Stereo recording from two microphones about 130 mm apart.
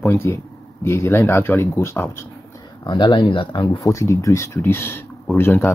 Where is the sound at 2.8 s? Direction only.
35° left (ahead or behind); by 5.7 s 15° left (ahead or behind).